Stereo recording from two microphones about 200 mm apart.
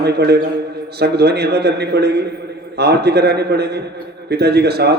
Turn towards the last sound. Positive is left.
turn(degrees=-55)  # may be behind; listen again after turning